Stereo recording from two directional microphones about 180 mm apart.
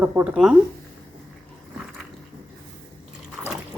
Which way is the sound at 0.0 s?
10° right (ahead or behind).